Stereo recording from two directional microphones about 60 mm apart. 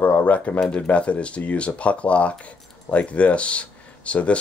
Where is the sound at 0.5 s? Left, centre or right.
Centre.